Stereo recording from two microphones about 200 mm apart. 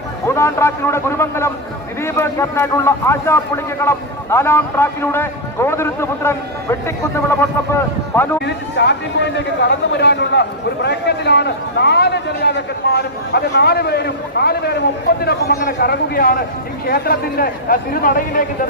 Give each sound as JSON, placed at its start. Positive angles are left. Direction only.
{"t": 0.3, "sound": "a man's voice", "side_deg": 15}
{"t": 8.4, "sound": "a man's voice", "side_deg": 60}